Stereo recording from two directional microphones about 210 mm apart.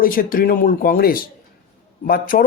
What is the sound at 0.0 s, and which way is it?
Speech, 40° left (ahead or behind).